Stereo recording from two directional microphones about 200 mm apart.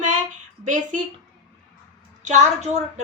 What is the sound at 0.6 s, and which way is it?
Speech, 40° right (ahead or behind).